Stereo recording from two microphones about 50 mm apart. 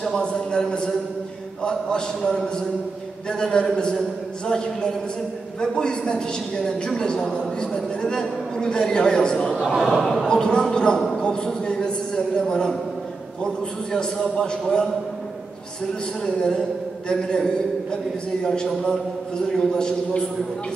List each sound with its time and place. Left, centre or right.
0.0 s a woman's voice: centre
9.8 s a woman's voice: centre
13.9 s a woman's voice: centre
16.2 s a woman's voice: centre